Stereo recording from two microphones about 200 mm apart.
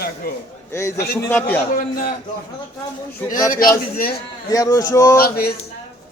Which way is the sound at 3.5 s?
45° left (ahead or behind).